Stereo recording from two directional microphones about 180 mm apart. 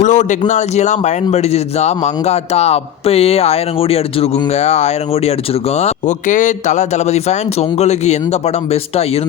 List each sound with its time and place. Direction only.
0.0 s a man's voice: 40° left (ahead or behind)